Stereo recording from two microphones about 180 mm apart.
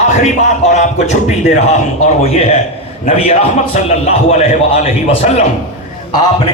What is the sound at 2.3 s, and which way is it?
A man's voice, 35° left (ahead or behind).